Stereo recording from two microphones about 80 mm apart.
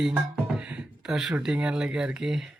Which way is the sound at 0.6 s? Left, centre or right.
Centre.